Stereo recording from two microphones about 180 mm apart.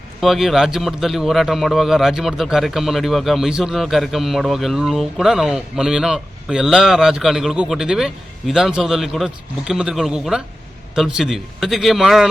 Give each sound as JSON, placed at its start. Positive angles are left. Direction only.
{"t": 0.2, "sound": "speech", "side_deg": 0}